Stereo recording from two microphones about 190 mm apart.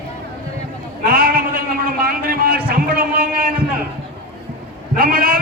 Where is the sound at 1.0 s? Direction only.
50° right (ahead or behind).